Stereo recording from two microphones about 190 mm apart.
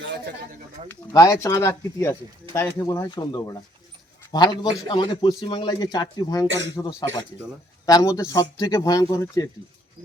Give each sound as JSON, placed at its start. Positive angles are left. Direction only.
{"t": 0.9, "sound": "a man's voice", "side_deg": 15}